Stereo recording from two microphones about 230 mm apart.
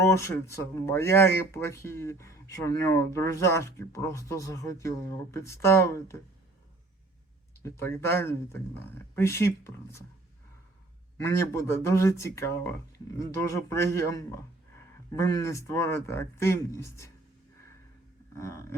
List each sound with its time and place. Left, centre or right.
0.0 s speech: centre
7.6 s speech: centre
11.2 s speech: centre
18.3 s a sound: centre